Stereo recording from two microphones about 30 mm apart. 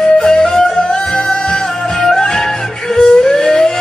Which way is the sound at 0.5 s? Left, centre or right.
Centre.